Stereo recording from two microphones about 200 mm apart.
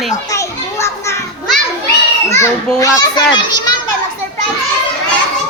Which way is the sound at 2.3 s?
15° left (ahead or behind).